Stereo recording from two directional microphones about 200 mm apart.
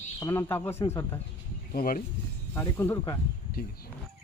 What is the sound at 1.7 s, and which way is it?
Speech, 45° left (ahead or behind).